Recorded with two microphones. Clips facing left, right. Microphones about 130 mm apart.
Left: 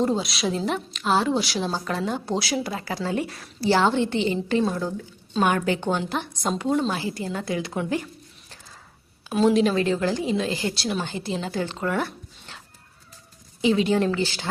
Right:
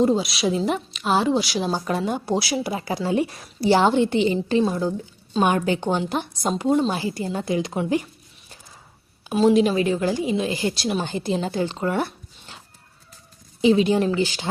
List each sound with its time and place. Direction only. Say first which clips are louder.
0.0 s a woman's voice: right 4 dB; 5° right (ahead or behind)
9.6 s a woman's voice: right 2 dB; 15° right (ahead or behind)